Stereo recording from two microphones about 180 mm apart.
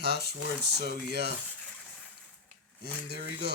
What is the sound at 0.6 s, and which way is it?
Speech, 65° right (ahead or behind).